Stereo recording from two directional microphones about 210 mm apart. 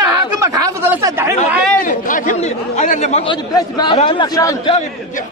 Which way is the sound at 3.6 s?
20° left (ahead or behind).